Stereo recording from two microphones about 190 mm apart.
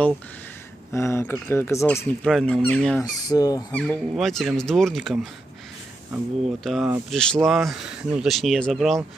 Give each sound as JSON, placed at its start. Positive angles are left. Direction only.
{"t": 0.9, "sound": "speech", "side_deg": 15}
{"t": 2.2, "sound": "speech", "side_deg": 0}
{"t": 3.0, "sound": "speech", "side_deg": 20}
{"t": 3.7, "sound": "speech", "side_deg": 5}